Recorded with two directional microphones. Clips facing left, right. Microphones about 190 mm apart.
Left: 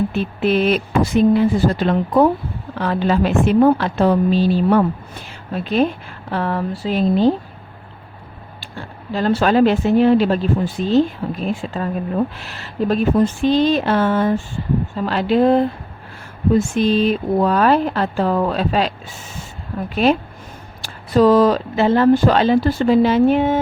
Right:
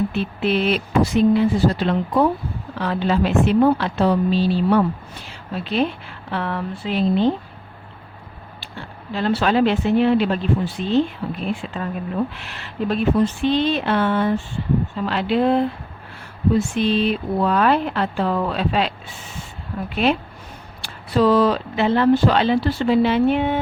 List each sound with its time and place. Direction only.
0.1 s speech: 45° left (ahead or behind)
8.6 s speech: 45° left (ahead or behind)